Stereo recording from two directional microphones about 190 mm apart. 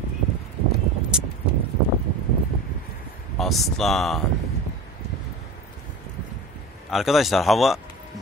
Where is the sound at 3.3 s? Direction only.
Centre (ahead or behind).